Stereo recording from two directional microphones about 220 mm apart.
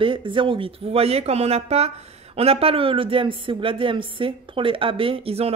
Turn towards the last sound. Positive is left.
turn(degrees=-25)  # may be behind; listen again after turning